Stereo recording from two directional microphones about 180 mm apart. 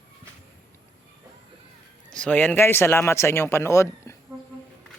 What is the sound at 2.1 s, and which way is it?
Speech, 5° left (ahead or behind).